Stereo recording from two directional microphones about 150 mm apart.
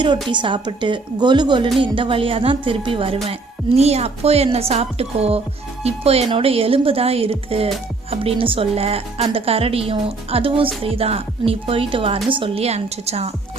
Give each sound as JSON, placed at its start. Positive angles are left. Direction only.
{"t": 0.3, "sound": "a woman's voice", "side_deg": -30}